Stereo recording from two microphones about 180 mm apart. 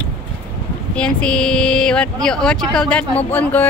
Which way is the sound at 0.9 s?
5° left (ahead or behind).